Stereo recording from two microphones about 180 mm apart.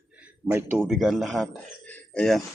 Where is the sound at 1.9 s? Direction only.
5° left (ahead or behind).